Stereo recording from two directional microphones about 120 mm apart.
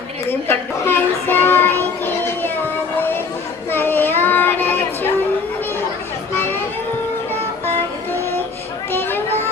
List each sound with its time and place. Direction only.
0.3 s child singing: 15° left (ahead or behind)
3.7 s child singing: 20° left (ahead or behind)
8.9 s a sound: 20° left (ahead or behind)